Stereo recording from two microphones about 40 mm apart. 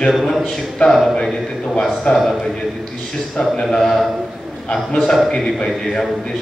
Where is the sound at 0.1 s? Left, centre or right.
Centre.